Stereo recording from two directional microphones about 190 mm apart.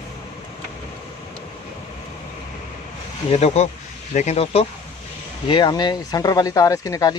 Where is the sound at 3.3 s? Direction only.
35° left (ahead or behind); by 7.1 s 20° left (ahead or behind).